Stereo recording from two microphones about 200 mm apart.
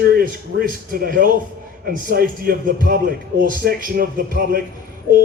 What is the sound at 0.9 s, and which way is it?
Speech, 45° right (ahead or behind).